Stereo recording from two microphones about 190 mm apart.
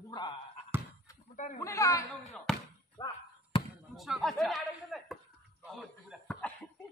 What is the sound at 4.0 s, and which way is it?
A man's voice, centre (ahead or behind).